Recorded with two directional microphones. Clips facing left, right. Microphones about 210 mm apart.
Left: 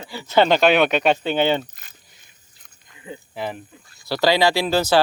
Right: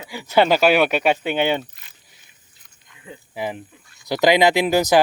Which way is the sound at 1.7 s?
45° left (ahead or behind).